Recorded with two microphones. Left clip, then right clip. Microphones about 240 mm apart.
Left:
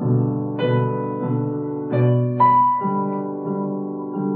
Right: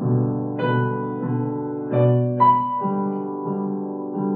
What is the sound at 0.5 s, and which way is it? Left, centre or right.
Music, centre.